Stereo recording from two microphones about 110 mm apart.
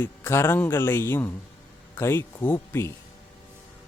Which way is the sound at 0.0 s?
20° left (ahead or behind).